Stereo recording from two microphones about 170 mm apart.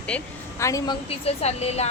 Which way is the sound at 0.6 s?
20° left (ahead or behind).